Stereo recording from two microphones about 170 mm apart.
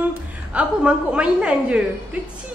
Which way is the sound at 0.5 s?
5° right (ahead or behind).